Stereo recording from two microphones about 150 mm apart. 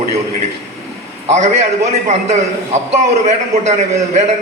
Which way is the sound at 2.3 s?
50° right (ahead or behind).